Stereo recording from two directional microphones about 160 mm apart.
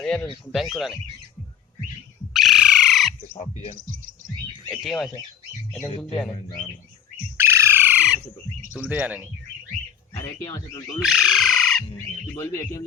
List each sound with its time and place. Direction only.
0.0 s speech: 5° left (ahead or behind)
2.3 s bird: centre (ahead or behind)
3.3 s speech: 40° left (ahead or behind)
4.7 s speech: centre (ahead or behind)
7.3 s bird: 15° right (ahead or behind)
8.7 s speech: 5° right (ahead or behind)
10.2 s speech: 20° left (ahead or behind)
11.2 s bird: centre (ahead or behind)
12.3 s speech: 20° left (ahead or behind)